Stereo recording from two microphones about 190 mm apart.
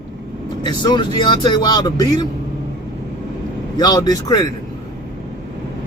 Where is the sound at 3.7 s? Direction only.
20° left (ahead or behind).